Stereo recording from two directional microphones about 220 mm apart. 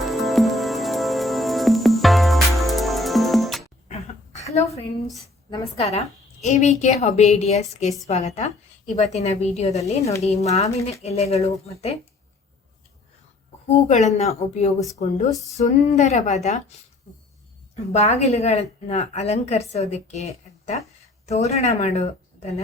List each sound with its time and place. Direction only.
0.0 s music: centre (ahead or behind)
3.8 s a sound: 30° left (ahead or behind)
5.1 s a woman's voice: 25° left (ahead or behind)
13.7 s a woman's voice: 30° left (ahead or behind)
17.9 s a woman's voice: 30° left (ahead or behind)